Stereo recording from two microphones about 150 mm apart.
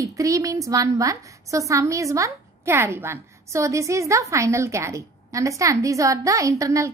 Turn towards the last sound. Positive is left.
turn(degrees=-20)  # may be behind; listen again after turning